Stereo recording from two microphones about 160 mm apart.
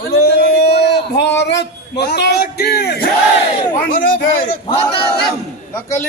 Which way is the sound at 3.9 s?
60° left (ahead or behind).